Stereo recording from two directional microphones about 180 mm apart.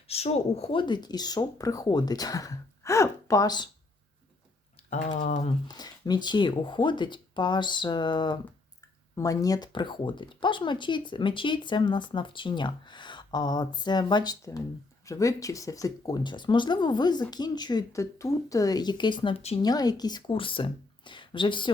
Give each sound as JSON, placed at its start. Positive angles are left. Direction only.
{"t": 0.1, "sound": "speech", "side_deg": 35}
{"t": 4.9, "sound": "speech", "side_deg": 40}
{"t": 5.6, "sound": "speech", "side_deg": 20}
{"t": 19.6, "sound": "speech", "side_deg": 20}